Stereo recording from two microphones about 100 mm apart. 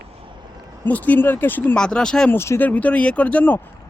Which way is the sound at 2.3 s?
25° left (ahead or behind).